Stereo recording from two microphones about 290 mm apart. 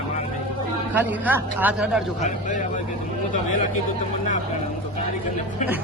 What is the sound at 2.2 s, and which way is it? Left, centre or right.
Speech, left.